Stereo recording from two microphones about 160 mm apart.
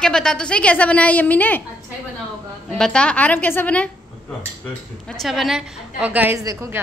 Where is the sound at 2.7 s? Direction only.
5° left (ahead or behind).